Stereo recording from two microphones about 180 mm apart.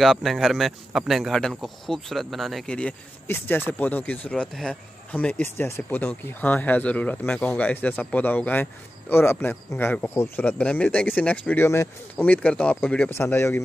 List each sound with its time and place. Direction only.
0.0 s speech: centre (ahead or behind)